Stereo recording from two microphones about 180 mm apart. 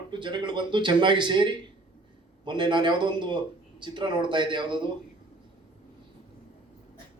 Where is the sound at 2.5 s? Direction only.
25° right (ahead or behind).